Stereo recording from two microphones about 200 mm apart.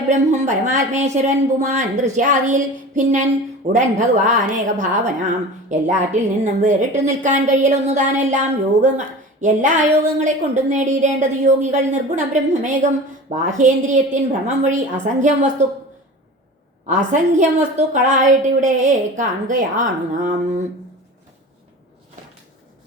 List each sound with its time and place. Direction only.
0.1 s a woman's voice: 35° right (ahead or behind)
16.8 s a woman's voice: 35° right (ahead or behind)